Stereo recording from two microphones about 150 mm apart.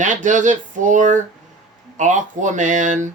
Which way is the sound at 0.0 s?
55° right (ahead or behind).